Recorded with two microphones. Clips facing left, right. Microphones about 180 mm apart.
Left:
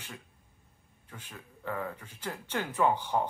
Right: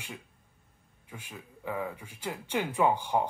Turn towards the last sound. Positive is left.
turn(degrees=-15)  # may be behind; listen again after turning